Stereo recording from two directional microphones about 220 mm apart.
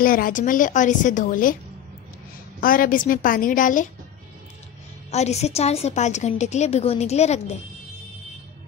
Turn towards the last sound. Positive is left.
turn(degrees=30)  # may be behind; listen again after turning